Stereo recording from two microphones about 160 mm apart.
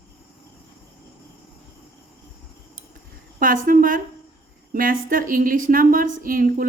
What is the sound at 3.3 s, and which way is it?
A woman's voice, 60° right (ahead or behind).